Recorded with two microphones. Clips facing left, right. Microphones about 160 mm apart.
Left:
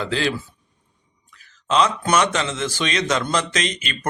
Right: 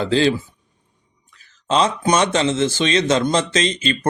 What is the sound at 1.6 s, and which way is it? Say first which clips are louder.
Speech: right 2 dB; 30° right (ahead or behind).